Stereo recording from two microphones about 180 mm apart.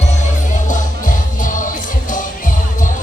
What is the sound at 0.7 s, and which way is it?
Music, 45° left (ahead or behind).